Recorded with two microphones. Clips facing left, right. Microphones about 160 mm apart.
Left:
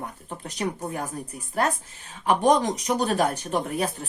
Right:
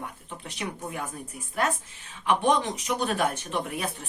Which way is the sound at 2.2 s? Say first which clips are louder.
Left 4 dB; 40° left (ahead or behind).